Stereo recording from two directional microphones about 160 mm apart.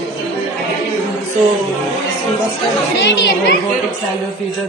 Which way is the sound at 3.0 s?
90° left.